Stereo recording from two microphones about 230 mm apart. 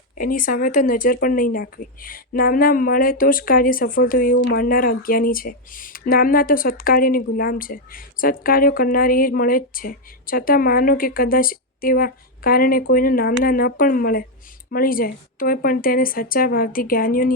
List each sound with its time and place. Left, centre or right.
0.2 s speech: left